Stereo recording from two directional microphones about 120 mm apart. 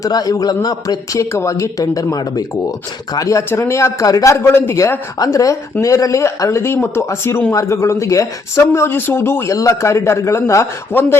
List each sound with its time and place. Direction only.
0.0 s speech: 30° left (ahead or behind)